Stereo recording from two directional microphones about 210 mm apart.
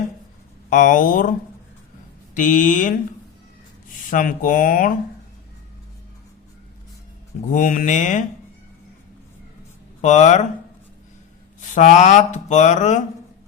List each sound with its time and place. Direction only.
0.7 s speech: 40° left (ahead or behind)
2.3 s speech: 40° left (ahead or behind)
4.1 s speech: 40° left (ahead or behind)
7.5 s speech: 40° left (ahead or behind)
10.0 s speech: 35° left (ahead or behind)
11.7 s speech: 35° left (ahead or behind)